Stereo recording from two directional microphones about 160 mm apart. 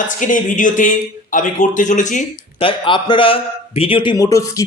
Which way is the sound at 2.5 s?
35° left (ahead or behind).